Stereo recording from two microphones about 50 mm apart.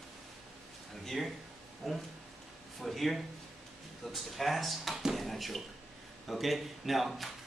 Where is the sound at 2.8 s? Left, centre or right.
Centre.